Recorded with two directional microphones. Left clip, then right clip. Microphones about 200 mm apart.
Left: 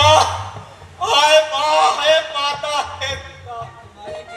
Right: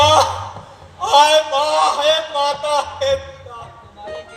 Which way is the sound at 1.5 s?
55° right (ahead or behind).